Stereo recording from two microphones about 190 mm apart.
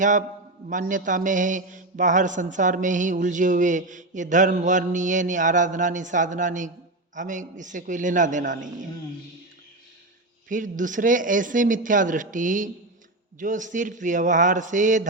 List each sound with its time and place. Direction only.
0.0 s a man's voice: 40° right (ahead or behind)
10.5 s a man's voice: 45° right (ahead or behind)